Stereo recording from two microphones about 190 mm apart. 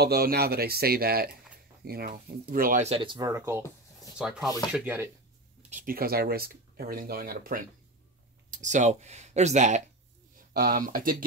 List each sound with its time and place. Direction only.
0.0 s speech: 55° right (ahead or behind); by 5.1 s 10° right (ahead or behind)
5.6 s speech: 40° right (ahead or behind)
10.5 s speech: 50° right (ahead or behind)